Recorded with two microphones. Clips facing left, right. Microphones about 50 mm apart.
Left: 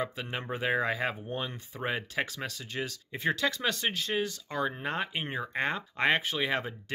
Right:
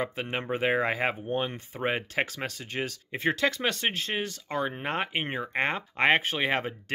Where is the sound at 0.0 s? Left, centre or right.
Right.